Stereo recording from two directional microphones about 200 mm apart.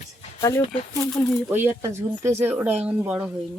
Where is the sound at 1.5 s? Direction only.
10° right (ahead or behind).